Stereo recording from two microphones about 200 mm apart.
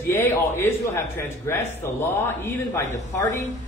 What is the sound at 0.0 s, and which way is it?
A man's voice, 10° left (ahead or behind).